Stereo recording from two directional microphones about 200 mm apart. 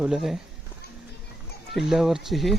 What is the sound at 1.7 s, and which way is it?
Speech, centre (ahead or behind).